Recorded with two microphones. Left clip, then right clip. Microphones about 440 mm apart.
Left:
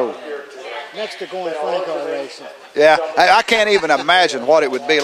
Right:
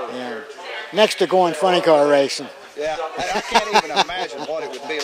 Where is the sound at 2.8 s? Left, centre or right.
Left.